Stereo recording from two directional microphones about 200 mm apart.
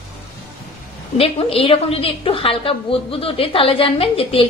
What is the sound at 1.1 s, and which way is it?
A woman's voice, 30° left (ahead or behind).